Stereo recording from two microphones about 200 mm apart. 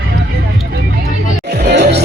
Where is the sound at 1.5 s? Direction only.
55° right (ahead or behind).